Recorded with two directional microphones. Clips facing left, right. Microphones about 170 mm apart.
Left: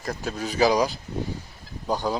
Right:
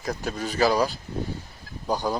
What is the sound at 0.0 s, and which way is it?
Speech, centre (ahead or behind).